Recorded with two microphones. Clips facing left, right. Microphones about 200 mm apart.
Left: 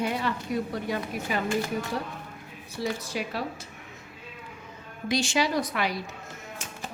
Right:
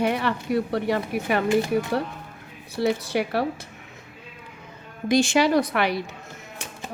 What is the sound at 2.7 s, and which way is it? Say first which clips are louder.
Speech: right 8 dB; 65° right (ahead or behind).